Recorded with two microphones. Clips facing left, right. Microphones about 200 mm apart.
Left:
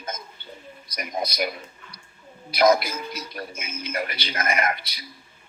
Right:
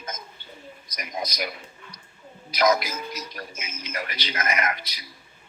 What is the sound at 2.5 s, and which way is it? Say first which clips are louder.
A man's voice: left 3 dB; 30° left (ahead or behind).